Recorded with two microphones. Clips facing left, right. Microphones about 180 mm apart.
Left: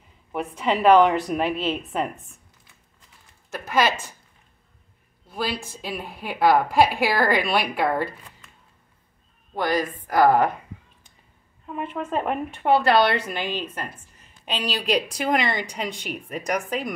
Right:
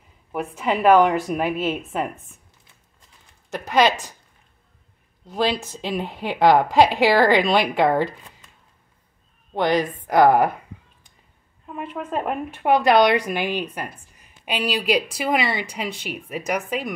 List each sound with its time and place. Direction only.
0.3 s a woman's voice: centre (ahead or behind)
3.4 s a woman's voice: 20° right (ahead or behind)
5.4 s a woman's voice: 20° right (ahead or behind)
7.0 s a woman's voice: 90° right
7.4 s a woman's voice: 20° right (ahead or behind)
9.6 s a woman's voice: 20° right (ahead or behind)
11.6 s a woman's voice: centre (ahead or behind)
12.7 s a woman's voice: 15° right (ahead or behind)